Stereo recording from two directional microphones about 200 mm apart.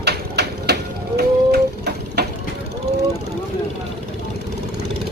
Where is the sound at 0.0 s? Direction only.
55° right (ahead or behind).